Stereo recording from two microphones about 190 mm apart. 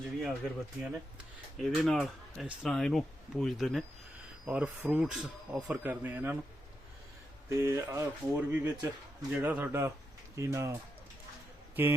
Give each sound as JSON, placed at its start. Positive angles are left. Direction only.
{"t": 0.2, "sound": "speech", "side_deg": 0}
{"t": 7.6, "sound": "speech", "side_deg": -15}